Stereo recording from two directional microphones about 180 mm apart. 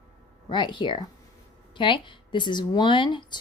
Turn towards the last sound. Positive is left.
turn(degrees=25)  # may be behind; listen again after turning